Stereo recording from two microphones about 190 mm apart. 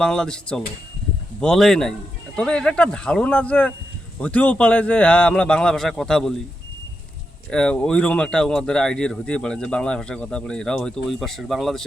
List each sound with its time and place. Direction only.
0.0 s speech: 5° left (ahead or behind)
7.5 s speech: 5° left (ahead or behind)